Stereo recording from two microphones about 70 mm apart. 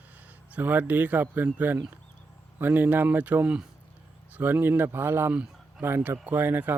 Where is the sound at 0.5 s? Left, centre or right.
Right.